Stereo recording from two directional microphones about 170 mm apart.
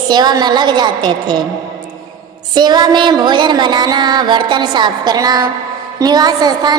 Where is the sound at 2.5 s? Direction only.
25° right (ahead or behind).